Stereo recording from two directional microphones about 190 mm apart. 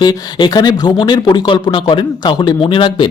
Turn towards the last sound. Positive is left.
turn(degrees=25)  # may be behind; listen again after turning